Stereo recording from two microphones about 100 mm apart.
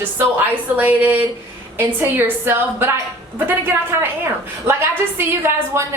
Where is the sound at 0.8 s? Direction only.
15° right (ahead or behind).